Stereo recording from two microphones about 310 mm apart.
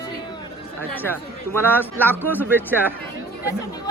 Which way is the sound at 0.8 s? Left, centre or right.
Centre.